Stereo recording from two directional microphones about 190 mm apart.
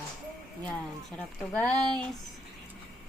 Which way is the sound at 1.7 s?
20° right (ahead or behind).